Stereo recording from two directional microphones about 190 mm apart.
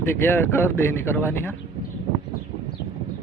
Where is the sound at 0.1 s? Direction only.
10° left (ahead or behind).